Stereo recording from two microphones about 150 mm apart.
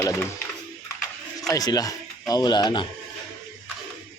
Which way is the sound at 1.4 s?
25° left (ahead or behind).